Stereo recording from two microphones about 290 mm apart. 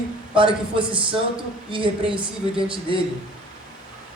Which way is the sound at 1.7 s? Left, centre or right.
Centre.